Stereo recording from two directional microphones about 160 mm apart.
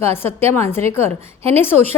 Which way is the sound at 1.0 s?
40° right (ahead or behind).